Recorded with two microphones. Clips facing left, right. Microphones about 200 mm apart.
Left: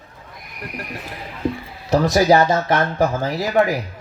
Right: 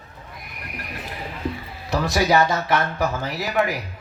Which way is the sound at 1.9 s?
40° left (ahead or behind).